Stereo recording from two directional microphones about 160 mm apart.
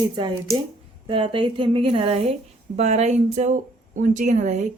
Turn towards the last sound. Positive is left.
turn(degrees=-50)  # may be behind; listen again after turning